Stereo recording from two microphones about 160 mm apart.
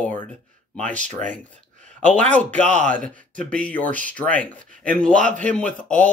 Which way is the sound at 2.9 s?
10° left (ahead or behind).